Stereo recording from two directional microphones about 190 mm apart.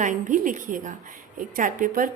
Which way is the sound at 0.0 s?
40° right (ahead or behind).